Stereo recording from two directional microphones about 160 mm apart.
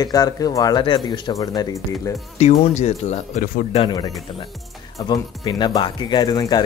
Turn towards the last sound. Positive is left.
turn(degrees=25)  # may be behind; listen again after turning